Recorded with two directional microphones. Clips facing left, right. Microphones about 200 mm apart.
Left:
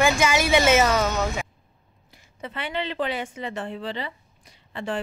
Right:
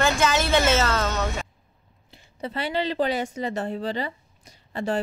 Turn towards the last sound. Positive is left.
turn(degrees=-40)  # may be behind; listen again after turning